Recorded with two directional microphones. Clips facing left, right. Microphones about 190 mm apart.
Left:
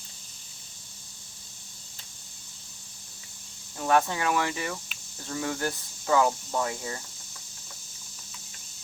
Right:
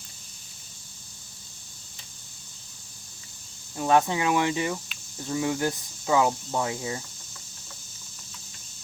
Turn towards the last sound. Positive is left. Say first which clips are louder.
# right 2 dB
turn(degrees=-15)  # may be behind; listen again after turning